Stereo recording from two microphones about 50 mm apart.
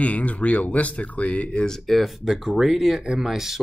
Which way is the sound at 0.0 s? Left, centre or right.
Left.